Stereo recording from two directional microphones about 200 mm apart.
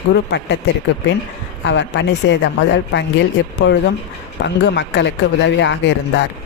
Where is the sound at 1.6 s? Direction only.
60° left (ahead or behind).